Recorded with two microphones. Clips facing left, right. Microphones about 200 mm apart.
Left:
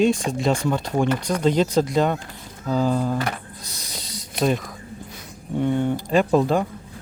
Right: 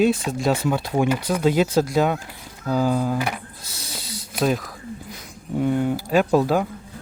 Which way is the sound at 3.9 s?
5° right (ahead or behind).